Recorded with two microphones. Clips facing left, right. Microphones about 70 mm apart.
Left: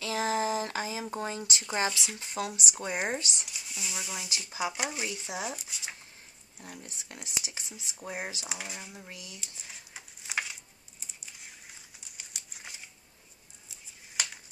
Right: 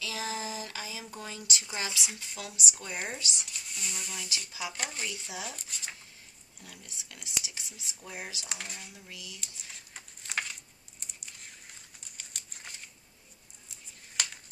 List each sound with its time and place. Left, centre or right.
0.0 s a sound: left
1.7 s speech: left
3.4 s speech: centre
4.5 s speech: left
4.7 s speech: centre
5.0 s speech: left
5.6 s speech: centre
6.6 s speech: left
8.5 s speech: centre
8.9 s speech: left
9.4 s typing: centre
12.0 s crumpling: centre
13.7 s a sound: centre